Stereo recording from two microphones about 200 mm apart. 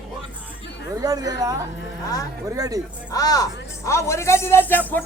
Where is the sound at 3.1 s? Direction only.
20° left (ahead or behind).